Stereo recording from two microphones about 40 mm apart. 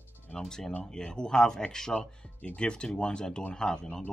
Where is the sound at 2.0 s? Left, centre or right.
Left.